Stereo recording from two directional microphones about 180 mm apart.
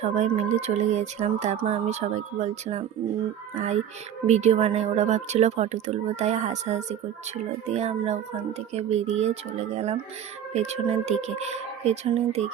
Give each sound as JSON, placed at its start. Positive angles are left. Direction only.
{"t": 0.0, "sound": "speech", "side_deg": -40}